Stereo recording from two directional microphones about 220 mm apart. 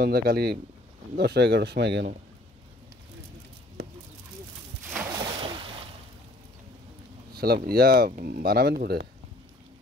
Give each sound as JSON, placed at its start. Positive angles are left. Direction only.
{"t": 0.0, "sound": "speech", "side_deg": -45}
{"t": 4.9, "sound": "splash", "side_deg": -15}
{"t": 7.3, "sound": "speech", "side_deg": -45}